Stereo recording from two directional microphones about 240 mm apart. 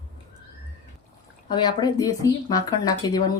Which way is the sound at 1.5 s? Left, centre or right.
Centre.